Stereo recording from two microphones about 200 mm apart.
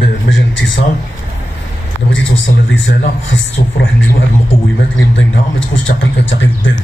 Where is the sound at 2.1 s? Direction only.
70° left (ahead or behind).